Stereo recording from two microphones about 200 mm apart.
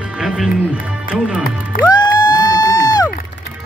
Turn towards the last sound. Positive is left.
turn(degrees=20)  # may be behind; listen again after turning